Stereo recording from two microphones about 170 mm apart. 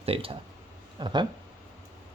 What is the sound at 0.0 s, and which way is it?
Speech, 35° right (ahead or behind).